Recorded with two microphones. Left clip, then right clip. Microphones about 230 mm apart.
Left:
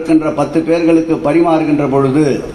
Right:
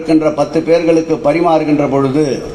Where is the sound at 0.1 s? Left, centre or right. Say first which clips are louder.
Right 1 dB; right.